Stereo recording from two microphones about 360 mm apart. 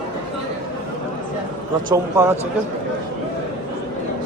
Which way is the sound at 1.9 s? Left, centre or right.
Centre.